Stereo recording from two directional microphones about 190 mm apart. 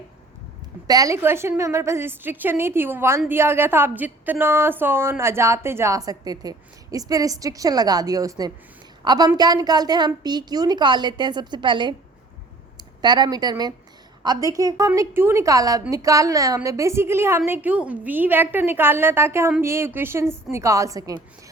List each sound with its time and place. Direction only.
0.9 s a woman's voice: 20° right (ahead or behind)